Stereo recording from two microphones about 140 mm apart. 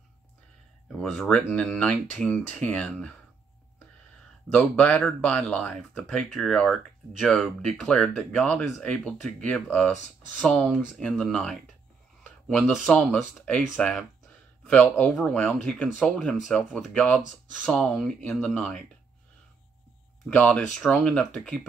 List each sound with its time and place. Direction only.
1.1 s speech: 5° left (ahead or behind)
4.5 s speech: 10° left (ahead or behind)
12.2 s a sound: 5° left (ahead or behind)
12.7 s speech: centre (ahead or behind)
20.2 s speech: 10° left (ahead or behind)